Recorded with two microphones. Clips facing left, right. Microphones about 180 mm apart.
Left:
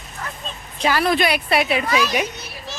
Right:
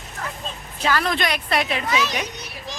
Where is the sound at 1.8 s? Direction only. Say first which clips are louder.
Left 3 dB; 20° right (ahead or behind).